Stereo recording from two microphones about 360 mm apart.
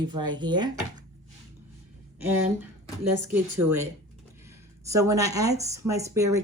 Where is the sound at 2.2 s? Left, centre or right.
Centre.